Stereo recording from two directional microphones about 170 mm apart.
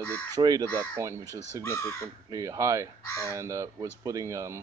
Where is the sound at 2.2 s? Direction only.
20° right (ahead or behind).